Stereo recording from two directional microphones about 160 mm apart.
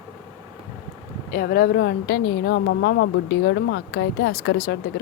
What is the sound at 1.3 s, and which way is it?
A woman's voice, 65° left (ahead or behind).